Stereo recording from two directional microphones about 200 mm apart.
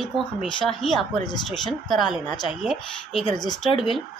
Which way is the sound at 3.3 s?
20° left (ahead or behind).